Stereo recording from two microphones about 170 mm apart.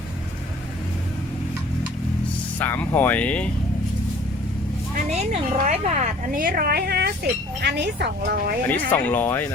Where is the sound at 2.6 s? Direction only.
10° left (ahead or behind).